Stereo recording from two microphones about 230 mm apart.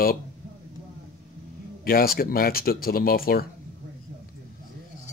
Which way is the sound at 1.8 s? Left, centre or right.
Left.